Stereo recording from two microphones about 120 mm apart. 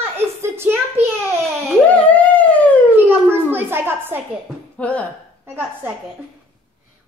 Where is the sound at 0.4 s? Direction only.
20° right (ahead or behind).